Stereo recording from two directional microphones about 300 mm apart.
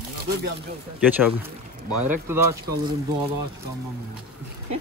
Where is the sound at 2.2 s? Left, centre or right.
Centre.